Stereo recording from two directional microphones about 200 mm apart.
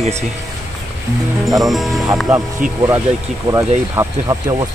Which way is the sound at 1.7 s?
Centre (ahead or behind).